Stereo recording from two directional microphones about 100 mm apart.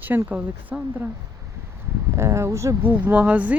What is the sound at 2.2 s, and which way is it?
Speech, 30° right (ahead or behind).